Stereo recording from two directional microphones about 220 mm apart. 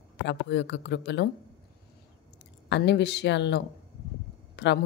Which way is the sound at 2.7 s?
50° left (ahead or behind).